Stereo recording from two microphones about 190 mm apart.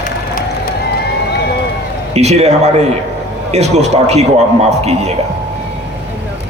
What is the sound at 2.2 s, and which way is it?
A man's voice, 35° right (ahead or behind).